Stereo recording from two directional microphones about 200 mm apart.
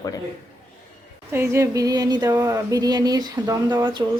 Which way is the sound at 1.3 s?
15° right (ahead or behind).